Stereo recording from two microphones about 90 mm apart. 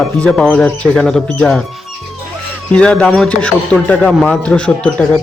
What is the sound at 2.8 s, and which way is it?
Speech, 10° left (ahead or behind).